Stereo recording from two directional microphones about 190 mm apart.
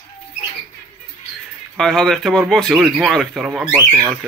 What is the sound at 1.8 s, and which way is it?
Speech, centre (ahead or behind).